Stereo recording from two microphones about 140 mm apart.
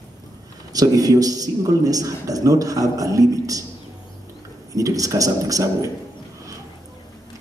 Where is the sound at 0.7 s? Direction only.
25° right (ahead or behind).